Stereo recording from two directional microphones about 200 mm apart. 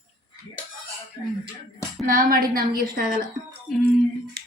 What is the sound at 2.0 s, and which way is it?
A woman's voice, 45° right (ahead or behind).